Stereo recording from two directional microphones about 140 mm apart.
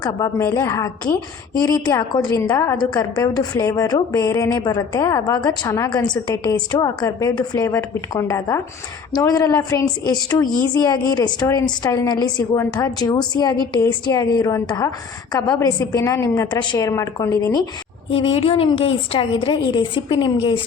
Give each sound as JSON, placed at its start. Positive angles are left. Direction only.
{"t": 0.0, "sound": "a woman's voice", "side_deg": 25}
{"t": 18.1, "sound": "a woman's voice", "side_deg": 40}